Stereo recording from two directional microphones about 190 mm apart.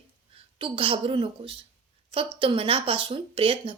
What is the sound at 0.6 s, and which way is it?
A woman's voice, 25° right (ahead or behind).